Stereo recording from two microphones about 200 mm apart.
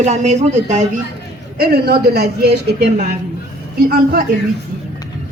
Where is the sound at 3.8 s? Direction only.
45° right (ahead or behind).